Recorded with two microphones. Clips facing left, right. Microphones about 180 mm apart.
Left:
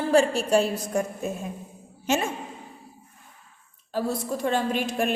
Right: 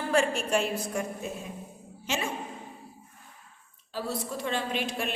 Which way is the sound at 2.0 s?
45° left (ahead or behind).